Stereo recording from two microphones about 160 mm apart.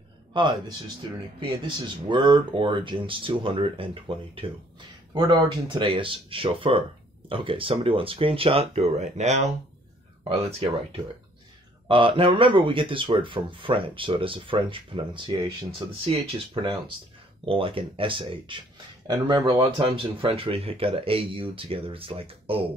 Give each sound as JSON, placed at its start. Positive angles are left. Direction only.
{"t": 0.3, "sound": "speech", "side_deg": -30}
{"t": 2.0, "sound": "speech", "side_deg": -30}
{"t": 11.9, "sound": "speech", "side_deg": -35}